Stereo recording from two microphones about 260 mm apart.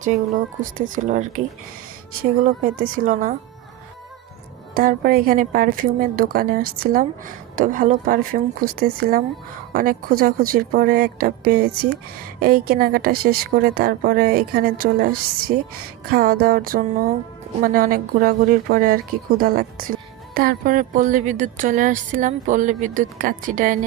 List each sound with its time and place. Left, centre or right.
0.0 s speech: right
2.7 s speech: right
4.7 s speech: right